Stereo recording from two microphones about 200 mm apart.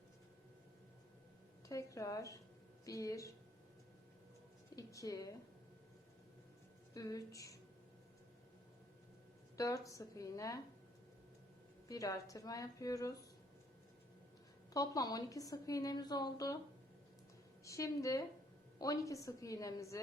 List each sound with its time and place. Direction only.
1.6 s a woman's voice: 15° left (ahead or behind)
4.7 s a woman's voice: 15° left (ahead or behind)
6.9 s a woman's voice: 15° left (ahead or behind)
9.6 s a woman's voice: 15° left (ahead or behind)
11.9 s a woman's voice: 15° left (ahead or behind)
14.7 s a woman's voice: 20° left (ahead or behind)
17.7 s a woman's voice: 15° left (ahead or behind)